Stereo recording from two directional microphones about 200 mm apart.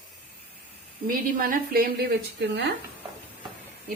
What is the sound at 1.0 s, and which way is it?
Speech, 45° right (ahead or behind).